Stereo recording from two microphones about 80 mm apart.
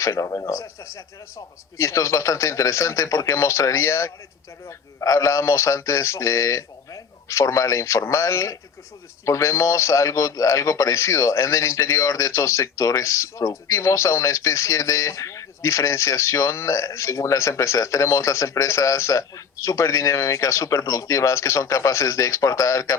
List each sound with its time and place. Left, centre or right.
0.0 s speech: left